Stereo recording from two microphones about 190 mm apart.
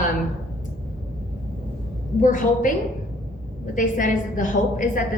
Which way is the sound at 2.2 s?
40° left (ahead or behind).